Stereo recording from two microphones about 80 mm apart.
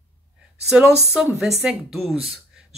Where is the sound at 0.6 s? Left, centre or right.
Centre.